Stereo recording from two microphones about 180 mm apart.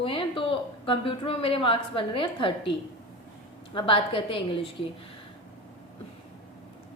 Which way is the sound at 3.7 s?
30° left (ahead or behind).